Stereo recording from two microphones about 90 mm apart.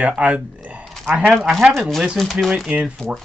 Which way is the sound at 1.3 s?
Centre (ahead or behind).